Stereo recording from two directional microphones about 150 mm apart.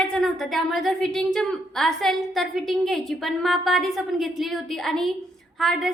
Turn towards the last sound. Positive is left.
turn(degrees=0)  # may be behind; listen again after turning